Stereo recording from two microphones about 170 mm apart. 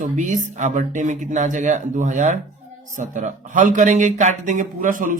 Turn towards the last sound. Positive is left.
turn(degrees=-50)  # may be behind; listen again after turning